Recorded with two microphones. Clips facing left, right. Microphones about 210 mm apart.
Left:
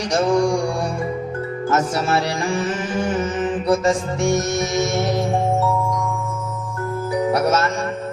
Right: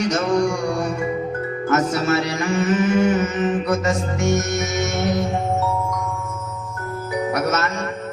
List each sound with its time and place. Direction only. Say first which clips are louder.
0.1 s mantra: left 2 dB; 30° left (ahead or behind)
1.7 s mantra: right 1 dB; 30° left (ahead or behind)
7.3 s music: left 3 dB; 30° left (ahead or behind)